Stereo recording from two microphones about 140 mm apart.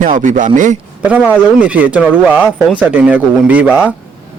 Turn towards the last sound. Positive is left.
turn(degrees=-10)  # may be behind; listen again after turning